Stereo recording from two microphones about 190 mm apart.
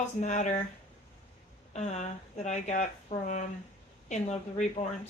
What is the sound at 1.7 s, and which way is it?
Speech, 35° left (ahead or behind).